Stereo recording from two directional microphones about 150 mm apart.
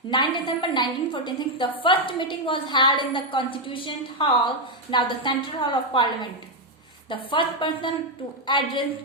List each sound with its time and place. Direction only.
0.1 s a woman's voice: 30° left (ahead or behind)
7.1 s a woman's voice: 35° left (ahead or behind)